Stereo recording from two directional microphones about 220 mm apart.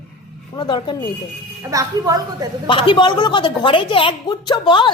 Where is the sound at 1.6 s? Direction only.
15° right (ahead or behind).